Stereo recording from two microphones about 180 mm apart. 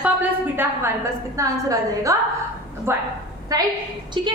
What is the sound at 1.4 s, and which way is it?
A woman's voice, 15° right (ahead or behind).